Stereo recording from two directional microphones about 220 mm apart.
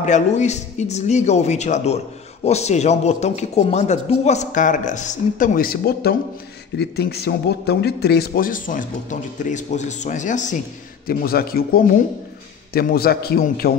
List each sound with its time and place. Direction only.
0.0 s a man's voice: 30° left (ahead or behind)